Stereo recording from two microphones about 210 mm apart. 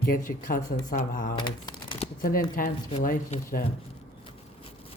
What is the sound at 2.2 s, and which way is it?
Speech, 40° left (ahead or behind).